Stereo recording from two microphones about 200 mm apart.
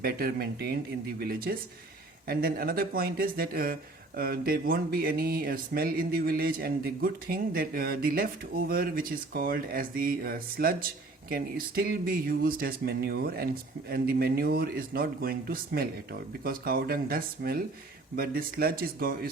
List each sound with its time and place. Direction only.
0.0 s speech: 50° right (ahead or behind)